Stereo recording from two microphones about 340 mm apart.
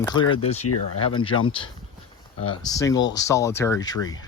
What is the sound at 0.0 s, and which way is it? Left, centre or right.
Speech, centre.